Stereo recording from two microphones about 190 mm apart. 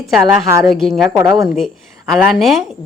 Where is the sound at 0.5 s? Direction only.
20° right (ahead or behind).